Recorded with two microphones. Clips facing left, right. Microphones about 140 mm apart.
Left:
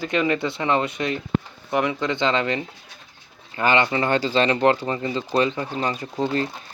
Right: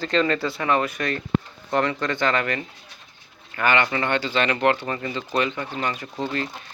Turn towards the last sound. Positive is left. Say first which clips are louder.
# left 4 dB
turn(degrees=35)  # may be behind; listen again after turning